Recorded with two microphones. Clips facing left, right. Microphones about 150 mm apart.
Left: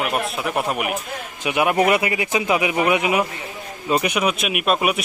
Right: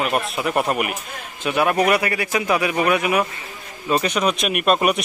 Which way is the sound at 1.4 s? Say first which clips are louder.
Even; 15° left (ahead or behind).